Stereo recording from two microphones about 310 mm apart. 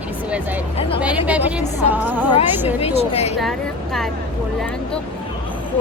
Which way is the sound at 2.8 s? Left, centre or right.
Centre.